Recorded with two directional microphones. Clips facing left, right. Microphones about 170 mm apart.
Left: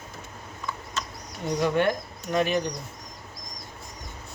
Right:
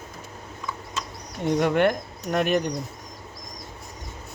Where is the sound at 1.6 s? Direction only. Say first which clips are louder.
Right 2 dB; 60° right (ahead or behind).